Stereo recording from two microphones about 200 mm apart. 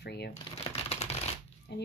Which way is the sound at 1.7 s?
60° left (ahead or behind).